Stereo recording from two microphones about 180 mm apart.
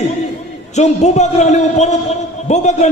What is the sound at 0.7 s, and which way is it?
A man's voice, 40° left (ahead or behind).